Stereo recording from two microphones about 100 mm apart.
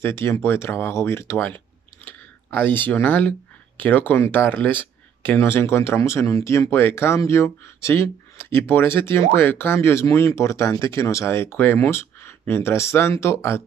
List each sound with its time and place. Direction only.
0.0 s speech: 25° left (ahead or behind)